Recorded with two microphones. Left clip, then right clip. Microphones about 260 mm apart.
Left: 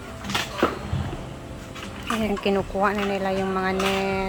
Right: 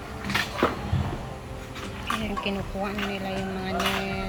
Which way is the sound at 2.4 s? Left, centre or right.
Centre.